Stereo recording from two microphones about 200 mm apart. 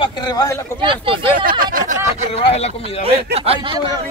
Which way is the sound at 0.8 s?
25° right (ahead or behind).